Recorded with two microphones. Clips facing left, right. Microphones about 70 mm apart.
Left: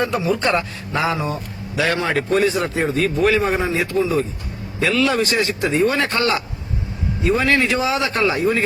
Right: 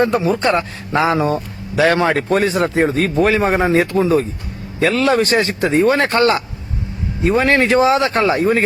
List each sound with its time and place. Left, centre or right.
0.0 s a man's voice: right